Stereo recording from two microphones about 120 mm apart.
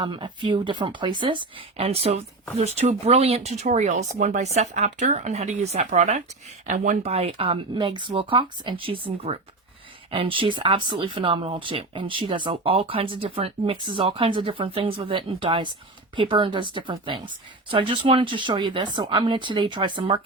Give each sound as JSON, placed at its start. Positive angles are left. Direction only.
{"t": 0.0, "sound": "speech", "side_deg": -45}
{"t": 1.5, "sound": "speech", "side_deg": -55}
{"t": 4.5, "sound": "speech", "side_deg": -70}
{"t": 6.7, "sound": "speech", "side_deg": -90}